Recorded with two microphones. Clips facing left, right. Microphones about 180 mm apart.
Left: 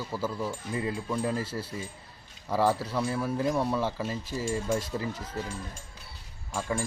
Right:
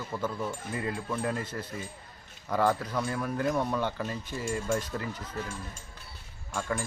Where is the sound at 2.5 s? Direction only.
5° left (ahead or behind).